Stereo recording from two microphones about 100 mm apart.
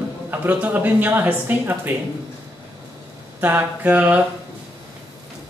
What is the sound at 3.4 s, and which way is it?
Speech, 20° right (ahead or behind).